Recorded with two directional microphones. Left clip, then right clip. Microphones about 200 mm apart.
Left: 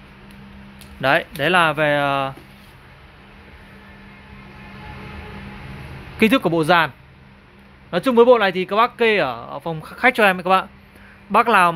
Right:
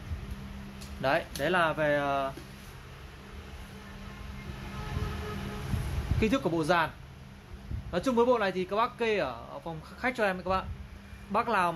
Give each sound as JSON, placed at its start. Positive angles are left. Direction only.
{"t": 1.0, "sound": "speech", "side_deg": 50}
{"t": 6.1, "sound": "speech", "side_deg": 50}
{"t": 7.9, "sound": "speech", "side_deg": 50}